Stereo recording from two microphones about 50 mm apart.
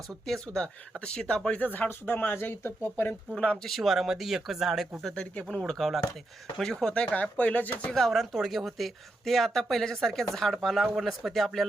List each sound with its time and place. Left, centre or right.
0.1 s speech: centre; by 2.9 s left
3.3 s speech: centre
3.6 s speech: centre
3.9 s speech: centre
5.1 s speech: left
5.7 s speech: centre
6.9 s speech: left
7.9 s speech: centre